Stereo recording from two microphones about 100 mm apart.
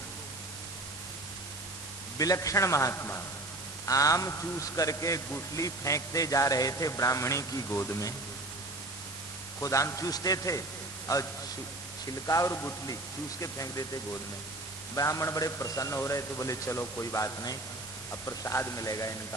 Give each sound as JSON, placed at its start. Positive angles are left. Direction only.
{"t": 2.1, "sound": "a man's voice", "side_deg": 35}
{"t": 9.6, "sound": "a man's voice", "side_deg": 30}